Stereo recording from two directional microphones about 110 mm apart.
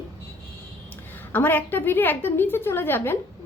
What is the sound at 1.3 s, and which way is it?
A woman's voice, 15° left (ahead or behind).